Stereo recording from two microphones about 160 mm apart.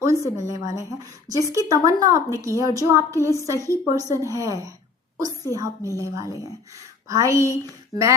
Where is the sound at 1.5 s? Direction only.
20° right (ahead or behind).